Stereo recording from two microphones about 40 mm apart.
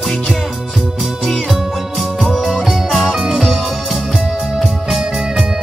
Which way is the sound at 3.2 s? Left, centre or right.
Centre.